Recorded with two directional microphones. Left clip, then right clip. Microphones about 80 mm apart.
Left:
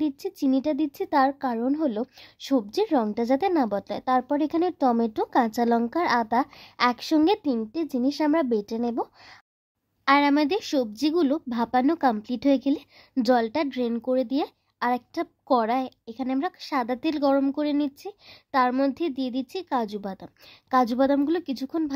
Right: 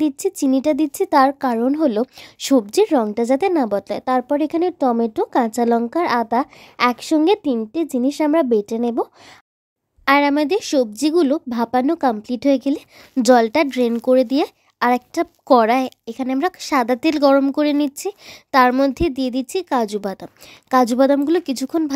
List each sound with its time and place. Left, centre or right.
0.0 s a woman's voice: right
2.3 s a woman's voice: right
7.7 s speech: right
8.0 s a woman's voice: right
10.2 s a woman's voice: right